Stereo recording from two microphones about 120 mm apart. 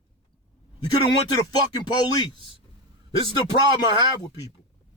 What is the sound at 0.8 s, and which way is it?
Speech, 35° left (ahead or behind).